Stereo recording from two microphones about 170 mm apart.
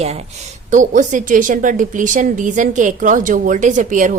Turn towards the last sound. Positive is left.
turn(degrees=-50)  # may be behind; listen again after turning